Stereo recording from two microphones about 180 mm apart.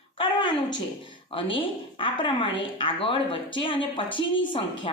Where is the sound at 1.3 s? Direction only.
30° left (ahead or behind).